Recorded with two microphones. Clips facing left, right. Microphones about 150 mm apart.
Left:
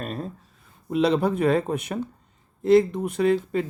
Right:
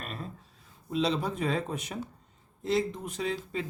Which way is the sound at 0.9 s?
60° left (ahead or behind).